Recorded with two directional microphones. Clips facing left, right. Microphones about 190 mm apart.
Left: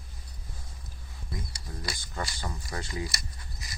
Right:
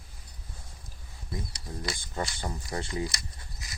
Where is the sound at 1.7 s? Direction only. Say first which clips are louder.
Right 3 dB; 30° right (ahead or behind).